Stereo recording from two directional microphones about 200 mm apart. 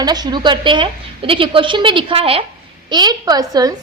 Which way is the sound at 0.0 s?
20° right (ahead or behind).